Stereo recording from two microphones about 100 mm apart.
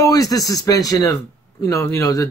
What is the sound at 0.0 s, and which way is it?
Speech, 35° left (ahead or behind).